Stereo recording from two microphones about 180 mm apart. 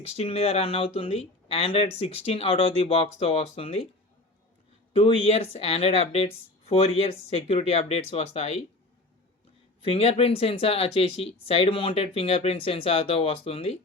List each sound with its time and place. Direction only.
0.0 s speech: 35° left (ahead or behind)
4.9 s speech: 30° left (ahead or behind)
9.8 s speech: 30° left (ahead or behind)